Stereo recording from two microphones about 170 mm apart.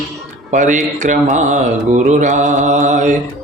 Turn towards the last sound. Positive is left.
turn(degrees=-45)  # may be behind; listen again after turning